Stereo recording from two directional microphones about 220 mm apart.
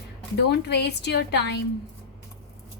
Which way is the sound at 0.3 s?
50° left (ahead or behind).